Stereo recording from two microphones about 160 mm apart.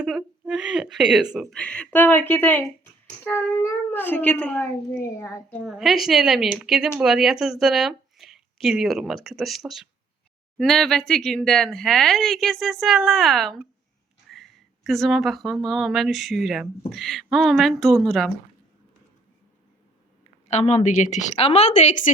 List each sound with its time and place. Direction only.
0.0 s a child's voice: 5° right (ahead or behind)
20.5 s a woman's voice: 45° left (ahead or behind)